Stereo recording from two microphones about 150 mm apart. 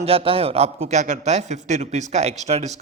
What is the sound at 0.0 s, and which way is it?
A man's voice, 40° right (ahead or behind).